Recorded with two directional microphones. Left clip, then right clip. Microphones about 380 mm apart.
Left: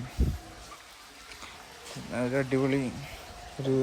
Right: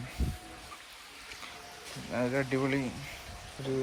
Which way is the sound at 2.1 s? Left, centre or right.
Centre.